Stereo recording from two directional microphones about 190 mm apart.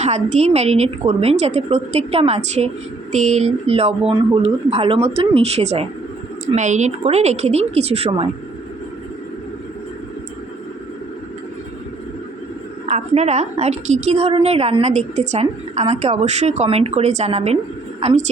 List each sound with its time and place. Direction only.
0.0 s a woman's voice: 35° right (ahead or behind)
12.9 s a woman's voice: 35° right (ahead or behind)